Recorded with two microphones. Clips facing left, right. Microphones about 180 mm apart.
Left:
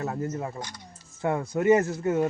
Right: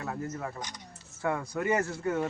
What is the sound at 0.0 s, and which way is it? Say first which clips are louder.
Speech: left 5 dB; 25° left (ahead or behind).